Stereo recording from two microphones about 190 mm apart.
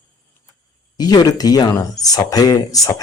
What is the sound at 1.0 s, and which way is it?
Speech, 20° left (ahead or behind).